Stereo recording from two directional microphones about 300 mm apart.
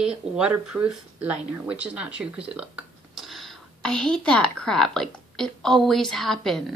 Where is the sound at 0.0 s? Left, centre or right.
Centre.